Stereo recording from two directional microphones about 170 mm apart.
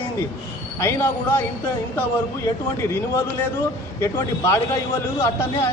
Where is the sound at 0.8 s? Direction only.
15° left (ahead or behind).